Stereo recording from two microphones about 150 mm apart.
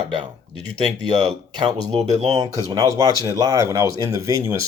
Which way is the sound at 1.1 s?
30° right (ahead or behind).